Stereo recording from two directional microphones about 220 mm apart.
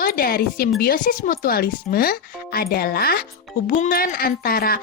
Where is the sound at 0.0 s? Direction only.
40° left (ahead or behind).